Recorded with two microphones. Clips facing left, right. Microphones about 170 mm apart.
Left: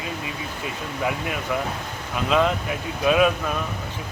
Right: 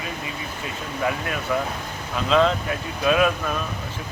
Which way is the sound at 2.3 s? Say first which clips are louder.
Right 2 dB; 10° left (ahead or behind).